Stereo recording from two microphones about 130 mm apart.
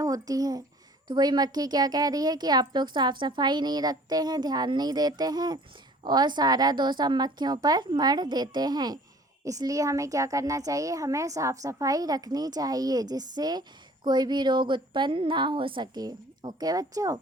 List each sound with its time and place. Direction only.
0.0 s a woman's voice: 25° right (ahead or behind)